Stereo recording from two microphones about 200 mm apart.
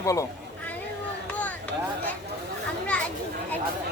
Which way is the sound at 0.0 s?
15° left (ahead or behind).